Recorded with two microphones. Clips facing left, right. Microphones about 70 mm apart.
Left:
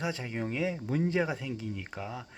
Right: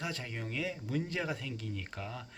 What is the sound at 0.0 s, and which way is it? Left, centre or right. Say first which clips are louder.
Speech: left 6 dB; centre.